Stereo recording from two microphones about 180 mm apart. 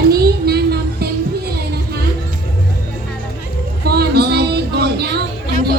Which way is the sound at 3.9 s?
60° right (ahead or behind).